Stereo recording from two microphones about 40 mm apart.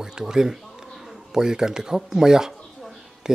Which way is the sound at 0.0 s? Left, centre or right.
Centre.